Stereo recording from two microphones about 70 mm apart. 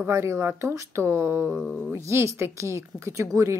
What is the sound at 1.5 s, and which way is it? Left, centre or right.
Speech, centre.